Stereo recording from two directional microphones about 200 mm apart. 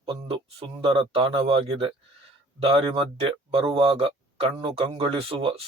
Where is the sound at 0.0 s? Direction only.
25° right (ahead or behind).